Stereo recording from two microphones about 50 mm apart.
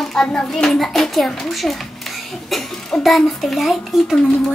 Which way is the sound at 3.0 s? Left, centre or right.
Centre.